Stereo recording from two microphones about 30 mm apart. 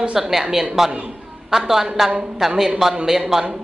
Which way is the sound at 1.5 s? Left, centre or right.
Right.